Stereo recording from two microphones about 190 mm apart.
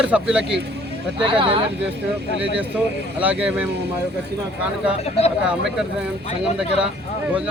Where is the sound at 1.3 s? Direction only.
25° right (ahead or behind).